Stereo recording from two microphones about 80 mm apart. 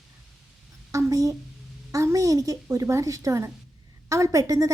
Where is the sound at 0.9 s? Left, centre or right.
Right.